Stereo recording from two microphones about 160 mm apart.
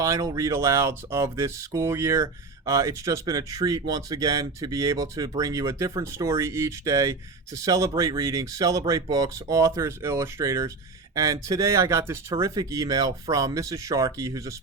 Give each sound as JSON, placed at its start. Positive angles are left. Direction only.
{"t": 0.0, "sound": "speech", "side_deg": -20}